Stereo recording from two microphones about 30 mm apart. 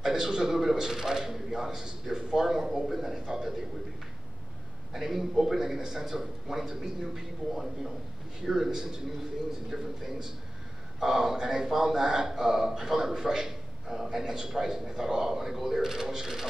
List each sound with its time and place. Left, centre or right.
0.0 s a man's voice: centre
2.9 s a man's voice: centre
4.9 s a man's voice: centre
14.9 s a man's voice: right